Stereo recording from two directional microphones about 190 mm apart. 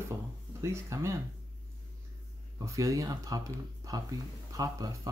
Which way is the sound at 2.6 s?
15° right (ahead or behind).